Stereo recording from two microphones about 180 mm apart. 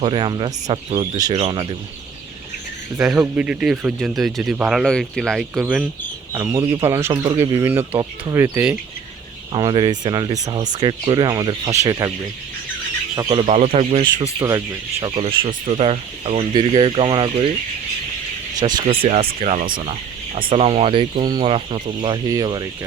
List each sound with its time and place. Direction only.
0.0 s speech: 30° right (ahead or behind)
3.2 s speech: 10° right (ahead or behind)
6.3 s speech: 20° right (ahead or behind)
9.5 s speech: 25° right (ahead or behind)
13.1 s speech: 20° right (ahead or behind)
13.4 s speech: 35° right (ahead or behind)
18.6 s speech: 25° right (ahead or behind)
19.0 s speech: 35° right (ahead or behind)